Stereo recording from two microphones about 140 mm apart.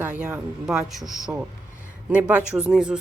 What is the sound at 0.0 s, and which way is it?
Speech, 10° right (ahead or behind).